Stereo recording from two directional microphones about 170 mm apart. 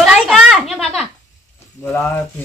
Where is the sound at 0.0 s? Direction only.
Centre (ahead or behind).